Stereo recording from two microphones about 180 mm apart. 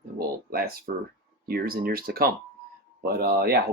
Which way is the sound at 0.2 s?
55° right (ahead or behind).